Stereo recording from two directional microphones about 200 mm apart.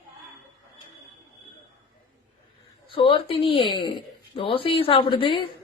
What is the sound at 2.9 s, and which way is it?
A woman's voice, 25° left (ahead or behind).